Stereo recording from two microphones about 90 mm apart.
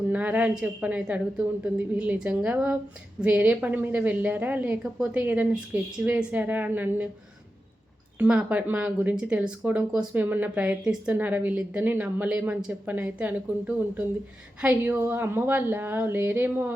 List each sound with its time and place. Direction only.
0.1 s speech: 15° right (ahead or behind)
8.4 s speech: 20° right (ahead or behind)